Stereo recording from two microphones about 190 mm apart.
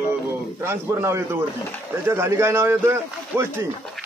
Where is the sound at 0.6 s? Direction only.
15° right (ahead or behind).